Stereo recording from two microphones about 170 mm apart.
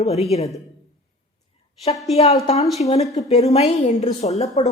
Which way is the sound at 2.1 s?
40° left (ahead or behind).